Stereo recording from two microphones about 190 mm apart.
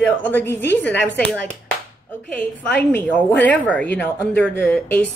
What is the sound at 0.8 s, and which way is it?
Speech, 10° left (ahead or behind).